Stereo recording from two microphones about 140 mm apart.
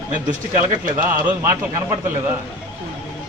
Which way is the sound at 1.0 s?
15° right (ahead or behind).